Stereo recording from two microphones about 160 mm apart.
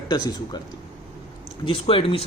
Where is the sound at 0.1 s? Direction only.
25° left (ahead or behind).